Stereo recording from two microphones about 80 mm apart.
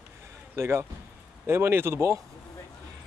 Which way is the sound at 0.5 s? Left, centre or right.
Right.